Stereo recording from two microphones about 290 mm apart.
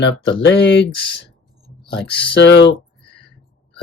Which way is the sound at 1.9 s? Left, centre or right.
Left.